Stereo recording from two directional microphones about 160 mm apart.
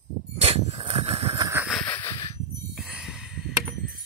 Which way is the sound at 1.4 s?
15° right (ahead or behind).